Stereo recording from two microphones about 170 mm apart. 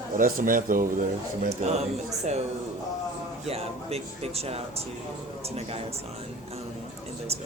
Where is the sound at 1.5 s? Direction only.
40° right (ahead or behind).